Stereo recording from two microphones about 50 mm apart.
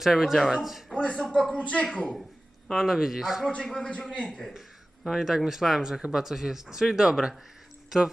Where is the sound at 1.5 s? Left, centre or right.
Left.